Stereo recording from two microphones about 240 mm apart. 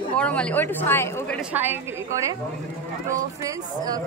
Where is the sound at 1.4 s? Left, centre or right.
Centre.